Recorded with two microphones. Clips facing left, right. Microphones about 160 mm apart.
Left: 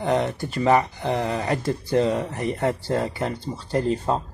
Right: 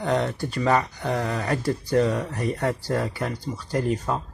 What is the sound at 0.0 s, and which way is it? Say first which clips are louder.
Speech: left 1 dB; 20° left (ahead or behind).